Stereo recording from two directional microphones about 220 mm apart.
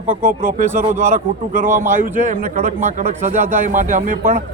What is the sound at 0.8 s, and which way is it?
A man's voice, 30° right (ahead or behind).